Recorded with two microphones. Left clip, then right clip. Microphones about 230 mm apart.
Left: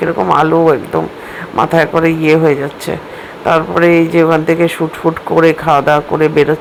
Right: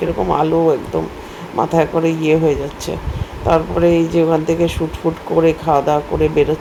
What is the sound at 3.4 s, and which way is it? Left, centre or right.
Speech, centre.